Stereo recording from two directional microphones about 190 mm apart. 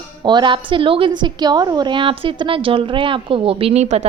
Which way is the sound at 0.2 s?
25° right (ahead or behind).